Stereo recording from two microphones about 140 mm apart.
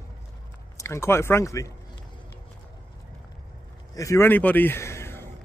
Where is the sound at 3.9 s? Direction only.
20° left (ahead or behind).